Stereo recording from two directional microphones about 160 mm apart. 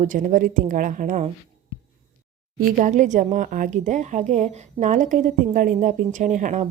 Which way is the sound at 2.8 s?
50° right (ahead or behind).